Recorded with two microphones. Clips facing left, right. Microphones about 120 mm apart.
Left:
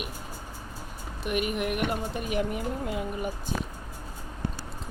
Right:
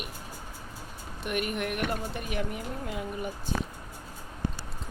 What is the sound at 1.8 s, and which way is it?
Speech, 20° left (ahead or behind).